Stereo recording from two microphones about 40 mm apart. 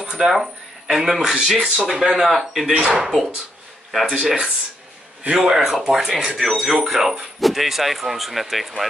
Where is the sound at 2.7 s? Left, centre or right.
Right.